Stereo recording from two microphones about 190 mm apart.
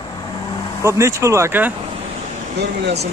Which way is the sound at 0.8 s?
15° right (ahead or behind).